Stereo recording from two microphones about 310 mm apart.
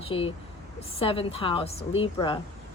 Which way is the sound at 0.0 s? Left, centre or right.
Centre.